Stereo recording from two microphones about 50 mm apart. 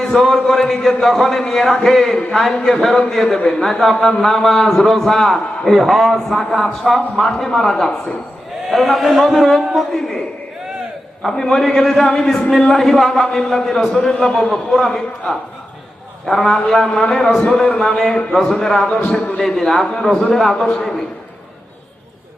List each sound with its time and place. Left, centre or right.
0.0 s a man's voice: centre
11.2 s a man's voice: centre
14.5 s a man's voice: centre
16.2 s a man's voice: centre
17.4 s a man's voice: centre
18.9 s a man's voice: left
19.4 s a man's voice: centre